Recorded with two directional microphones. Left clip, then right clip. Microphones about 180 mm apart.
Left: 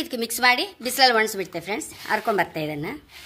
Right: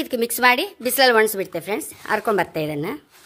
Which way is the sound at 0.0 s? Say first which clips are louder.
Right 3 dB; 50° right (ahead or behind).